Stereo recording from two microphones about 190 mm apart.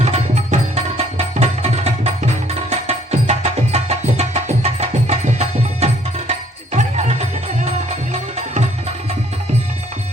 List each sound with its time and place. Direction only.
0.0 s music: 35° right (ahead or behind)